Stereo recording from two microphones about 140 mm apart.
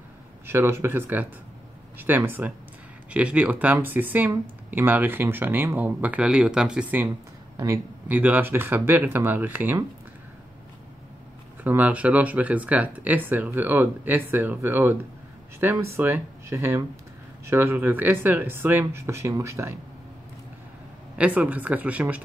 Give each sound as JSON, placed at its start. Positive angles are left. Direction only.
{"t": 0.5, "sound": "speech", "side_deg": -15}
{"t": 11.6, "sound": "speech", "side_deg": -10}
{"t": 21.2, "sound": "speech", "side_deg": -10}